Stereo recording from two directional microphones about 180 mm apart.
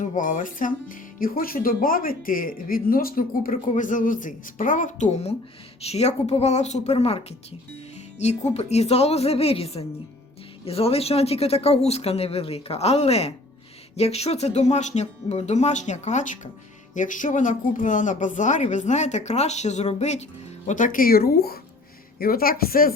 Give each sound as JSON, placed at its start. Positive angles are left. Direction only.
{"t": 0.0, "sound": "speech", "side_deg": 45}